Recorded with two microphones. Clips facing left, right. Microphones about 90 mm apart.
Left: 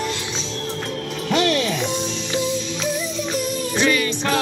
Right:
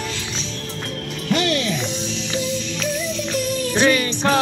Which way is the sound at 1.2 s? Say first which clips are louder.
Left 1 dB; 25° left (ahead or behind).